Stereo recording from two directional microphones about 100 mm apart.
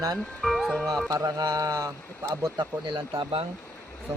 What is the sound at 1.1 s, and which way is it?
Speech, 35° right (ahead or behind).